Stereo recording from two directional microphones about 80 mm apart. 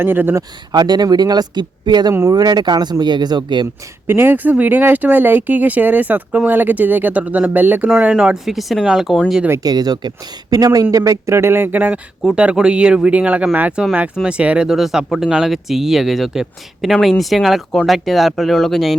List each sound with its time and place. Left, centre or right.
0.0 s speech: right
0.7 s speech: right
4.0 s speech: right
8.0 s speech: centre
9.6 s speech: right
10.5 s speech: right; by 14.7 s centre
14.7 s speech: centre